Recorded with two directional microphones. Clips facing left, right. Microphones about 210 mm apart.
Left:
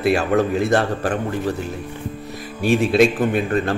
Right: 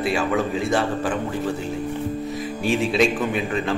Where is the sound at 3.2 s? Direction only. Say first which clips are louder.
Left 4 dB; 55° left (ahead or behind).